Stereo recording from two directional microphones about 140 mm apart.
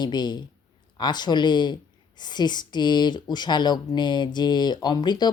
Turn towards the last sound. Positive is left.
turn(degrees=30)  # may be behind; listen again after turning